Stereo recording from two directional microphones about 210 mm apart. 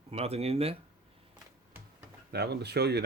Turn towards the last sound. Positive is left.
turn(degrees=-50)  # may be behind; listen again after turning